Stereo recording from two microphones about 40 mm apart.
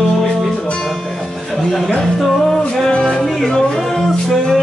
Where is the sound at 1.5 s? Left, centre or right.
Centre.